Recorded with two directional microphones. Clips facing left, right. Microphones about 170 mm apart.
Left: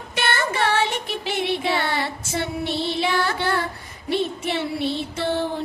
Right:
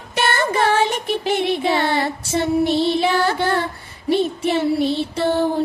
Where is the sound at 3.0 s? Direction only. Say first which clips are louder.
Right 4 dB; 40° right (ahead or behind).